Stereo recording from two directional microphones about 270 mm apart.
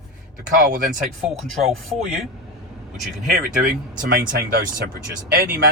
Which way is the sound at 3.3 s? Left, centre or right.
Right.